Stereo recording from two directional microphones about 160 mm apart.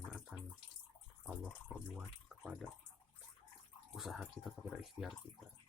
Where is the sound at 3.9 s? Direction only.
Centre (ahead or behind).